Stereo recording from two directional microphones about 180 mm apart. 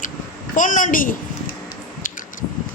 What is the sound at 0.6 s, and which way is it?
Speech, 45° left (ahead or behind).